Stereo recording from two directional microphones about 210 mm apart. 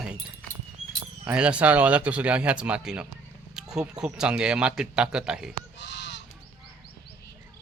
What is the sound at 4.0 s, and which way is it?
Speech, 5° right (ahead or behind).